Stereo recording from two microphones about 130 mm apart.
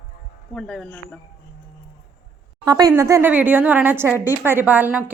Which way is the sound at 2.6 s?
30° right (ahead or behind).